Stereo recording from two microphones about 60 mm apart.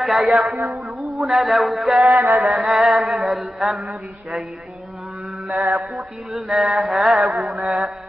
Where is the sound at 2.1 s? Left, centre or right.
Right.